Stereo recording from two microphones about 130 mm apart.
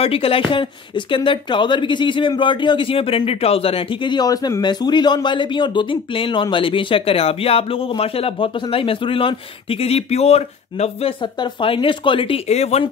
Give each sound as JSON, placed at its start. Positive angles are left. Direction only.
{"t": 0.0, "sound": "speech", "side_deg": 45}